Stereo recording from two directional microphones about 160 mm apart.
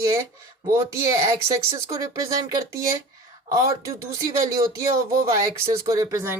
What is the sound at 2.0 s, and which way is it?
Speech, 20° right (ahead or behind).